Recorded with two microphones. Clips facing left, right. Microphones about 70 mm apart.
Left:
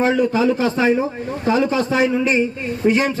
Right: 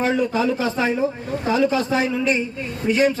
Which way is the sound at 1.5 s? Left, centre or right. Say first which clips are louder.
Left 2 dB; left.